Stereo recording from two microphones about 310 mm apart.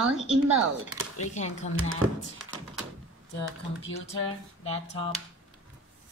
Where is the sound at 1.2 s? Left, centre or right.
Left.